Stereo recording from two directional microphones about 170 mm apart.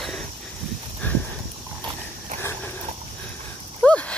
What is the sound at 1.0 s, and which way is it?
Clip-clop, 10° left (ahead or behind).